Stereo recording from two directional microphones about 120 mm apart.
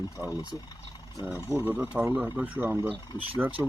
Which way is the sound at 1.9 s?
5° right (ahead or behind).